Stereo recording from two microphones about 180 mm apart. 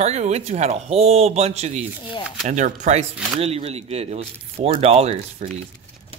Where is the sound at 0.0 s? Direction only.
40° right (ahead or behind).